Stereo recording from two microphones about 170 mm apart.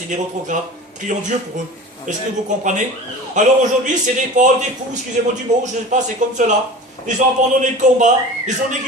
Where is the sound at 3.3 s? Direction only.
45° right (ahead or behind).